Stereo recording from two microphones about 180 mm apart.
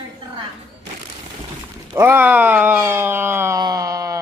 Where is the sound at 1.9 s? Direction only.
10° right (ahead or behind).